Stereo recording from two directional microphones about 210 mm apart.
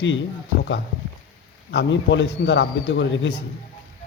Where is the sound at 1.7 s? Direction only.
60° left (ahead or behind).